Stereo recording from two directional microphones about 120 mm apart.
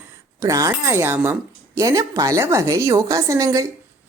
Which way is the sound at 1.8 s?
30° right (ahead or behind).